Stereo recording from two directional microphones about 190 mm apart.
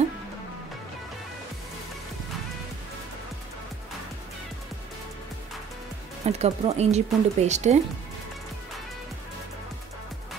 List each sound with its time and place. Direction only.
6.2 s speech: 35° right (ahead or behind)